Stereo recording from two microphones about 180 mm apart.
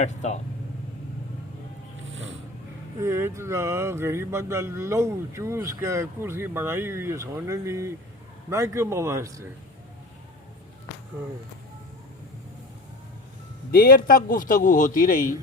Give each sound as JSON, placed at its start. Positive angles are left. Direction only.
{"t": 0.0, "sound": "speech", "side_deg": 40}
{"t": 3.0, "sound": "speech", "side_deg": -15}
{"t": 13.7, "sound": "a man's voice", "side_deg": 55}